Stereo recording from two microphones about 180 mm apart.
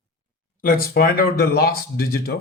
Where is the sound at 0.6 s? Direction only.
55° left (ahead or behind).